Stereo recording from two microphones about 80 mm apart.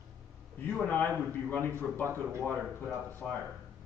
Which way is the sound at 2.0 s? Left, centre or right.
Right.